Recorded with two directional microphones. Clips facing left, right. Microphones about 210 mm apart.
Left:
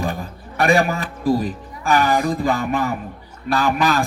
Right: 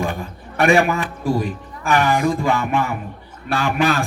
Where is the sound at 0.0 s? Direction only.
35° left (ahead or behind).